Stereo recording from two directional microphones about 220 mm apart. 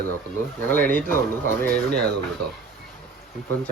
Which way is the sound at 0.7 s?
10° left (ahead or behind).